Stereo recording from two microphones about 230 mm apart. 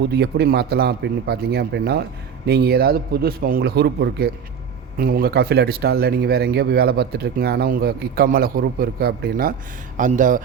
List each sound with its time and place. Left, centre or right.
0.1 s speech: right